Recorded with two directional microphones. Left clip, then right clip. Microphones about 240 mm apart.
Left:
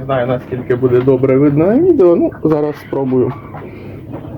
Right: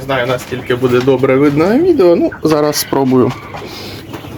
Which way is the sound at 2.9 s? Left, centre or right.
Right.